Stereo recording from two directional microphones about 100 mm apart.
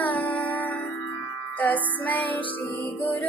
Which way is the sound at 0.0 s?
15° left (ahead or behind).